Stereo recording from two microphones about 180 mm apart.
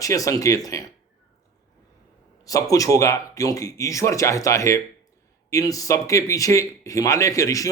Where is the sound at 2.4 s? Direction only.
20° left (ahead or behind).